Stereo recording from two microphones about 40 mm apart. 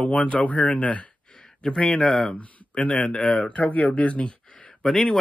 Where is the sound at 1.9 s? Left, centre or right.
Centre.